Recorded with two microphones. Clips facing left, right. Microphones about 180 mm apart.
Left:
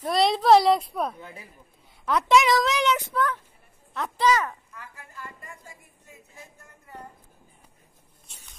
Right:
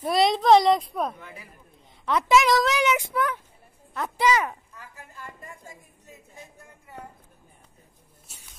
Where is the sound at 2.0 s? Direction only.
Centre (ahead or behind).